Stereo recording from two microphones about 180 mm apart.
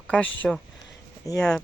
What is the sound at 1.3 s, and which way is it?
Speech, 20° left (ahead or behind).